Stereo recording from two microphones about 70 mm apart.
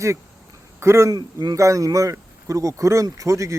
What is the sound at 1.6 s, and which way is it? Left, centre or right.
Speech, right.